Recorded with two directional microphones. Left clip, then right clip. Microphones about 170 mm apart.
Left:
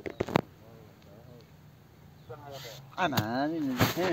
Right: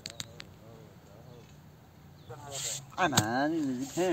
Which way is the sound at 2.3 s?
40° left (ahead or behind).